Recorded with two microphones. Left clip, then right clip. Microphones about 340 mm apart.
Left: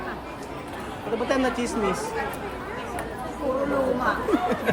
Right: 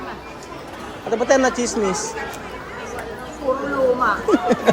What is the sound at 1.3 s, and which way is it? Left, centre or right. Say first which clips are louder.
Speech: right 9 dB; centre.